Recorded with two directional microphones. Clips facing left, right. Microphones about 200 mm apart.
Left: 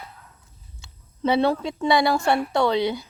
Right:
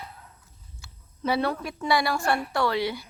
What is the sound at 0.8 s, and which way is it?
A woman's voice, 25° left (ahead or behind).